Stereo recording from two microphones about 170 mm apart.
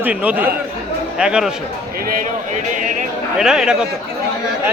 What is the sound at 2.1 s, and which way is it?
Speech, 50° right (ahead or behind).